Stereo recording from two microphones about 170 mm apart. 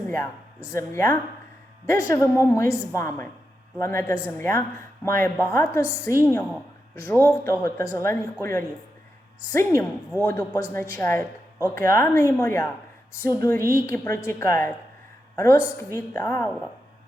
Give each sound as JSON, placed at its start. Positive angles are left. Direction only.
{"t": 0.1, "sound": "a woman's voice", "side_deg": 15}
{"t": 15.8, "sound": "a woman's voice", "side_deg": 15}